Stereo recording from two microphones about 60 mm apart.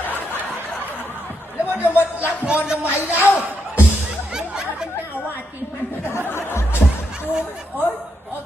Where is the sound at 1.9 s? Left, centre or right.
Right.